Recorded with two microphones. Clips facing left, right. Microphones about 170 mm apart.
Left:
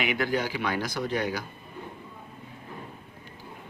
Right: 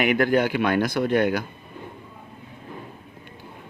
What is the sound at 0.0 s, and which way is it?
Speech, 55° right (ahead or behind).